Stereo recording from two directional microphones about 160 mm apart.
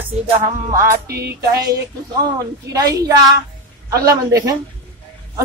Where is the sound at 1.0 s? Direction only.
80° right.